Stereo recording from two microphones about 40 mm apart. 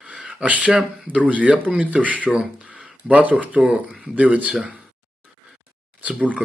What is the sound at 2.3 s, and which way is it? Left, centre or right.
Speech, right.